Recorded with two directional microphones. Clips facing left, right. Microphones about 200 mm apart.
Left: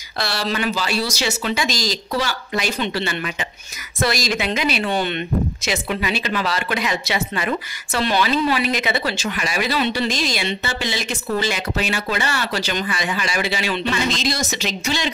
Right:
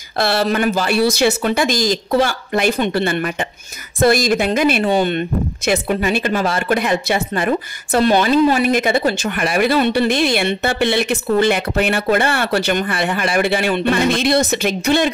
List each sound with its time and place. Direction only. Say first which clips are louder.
0.2 s speech: right 7 dB; 55° right (ahead or behind)